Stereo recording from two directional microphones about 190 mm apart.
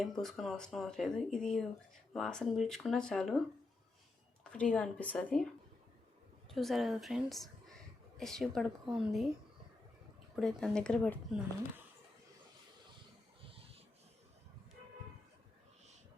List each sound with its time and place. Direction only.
0.0 s speech: centre (ahead or behind)
4.5 s speech: 5° left (ahead or behind)
6.5 s speech: centre (ahead or behind)
10.3 s speech: centre (ahead or behind)